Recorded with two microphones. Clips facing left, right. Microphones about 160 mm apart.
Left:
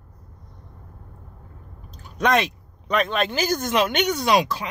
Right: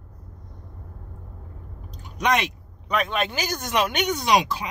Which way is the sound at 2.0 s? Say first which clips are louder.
Left 3 dB; 15° right (ahead or behind).